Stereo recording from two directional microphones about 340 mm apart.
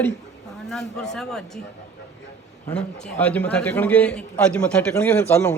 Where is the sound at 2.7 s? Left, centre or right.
Centre.